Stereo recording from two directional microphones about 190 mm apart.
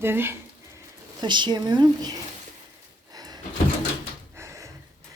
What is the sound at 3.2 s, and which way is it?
Drawer open or close, 20° right (ahead or behind).